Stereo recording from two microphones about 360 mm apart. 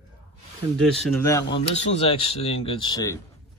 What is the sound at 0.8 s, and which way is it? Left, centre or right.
Speech, centre.